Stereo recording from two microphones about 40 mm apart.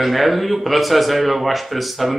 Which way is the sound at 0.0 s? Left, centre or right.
Centre.